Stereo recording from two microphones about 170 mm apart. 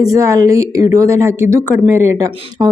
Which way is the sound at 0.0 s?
20° right (ahead or behind).